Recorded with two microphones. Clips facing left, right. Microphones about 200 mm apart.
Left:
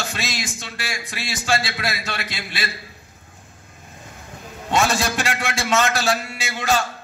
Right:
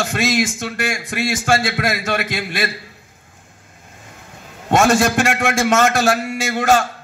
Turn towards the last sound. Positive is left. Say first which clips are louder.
# right 6 dB
turn(degrees=-50)  # may be behind; listen again after turning